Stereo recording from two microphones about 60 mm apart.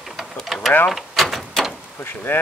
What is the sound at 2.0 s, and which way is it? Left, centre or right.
Speech, left.